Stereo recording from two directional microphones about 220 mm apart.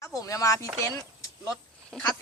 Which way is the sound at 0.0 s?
15° left (ahead or behind).